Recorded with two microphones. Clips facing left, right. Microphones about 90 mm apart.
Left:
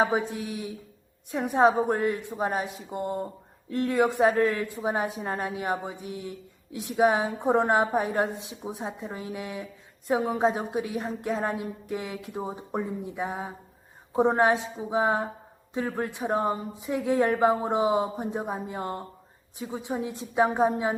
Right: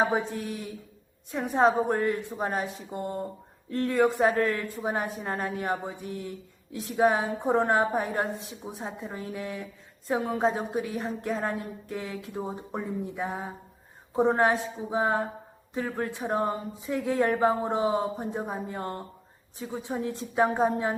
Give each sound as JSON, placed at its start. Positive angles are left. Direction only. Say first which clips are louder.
{"t": 0.1, "sound": "a woman's voice", "louder": "left 1 dB", "side_deg": 15}
{"t": 1.9, "sound": "a woman's voice", "louder": "even", "side_deg": 15}